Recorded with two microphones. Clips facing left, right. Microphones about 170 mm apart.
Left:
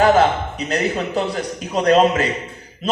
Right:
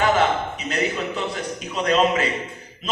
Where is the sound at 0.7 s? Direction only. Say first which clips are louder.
Left 4 dB; 35° left (ahead or behind).